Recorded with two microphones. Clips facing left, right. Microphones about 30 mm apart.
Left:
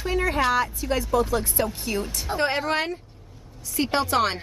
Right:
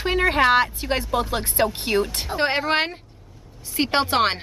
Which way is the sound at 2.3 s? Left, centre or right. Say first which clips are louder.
Right 3 dB; right.